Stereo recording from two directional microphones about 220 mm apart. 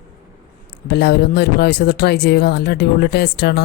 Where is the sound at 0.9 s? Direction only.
50° left (ahead or behind).